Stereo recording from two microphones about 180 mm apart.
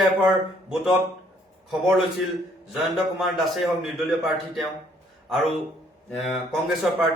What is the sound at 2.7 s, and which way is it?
A man's voice, centre (ahead or behind).